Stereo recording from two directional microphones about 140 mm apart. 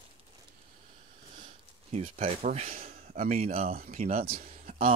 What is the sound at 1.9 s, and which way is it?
Speech, 45° right (ahead or behind).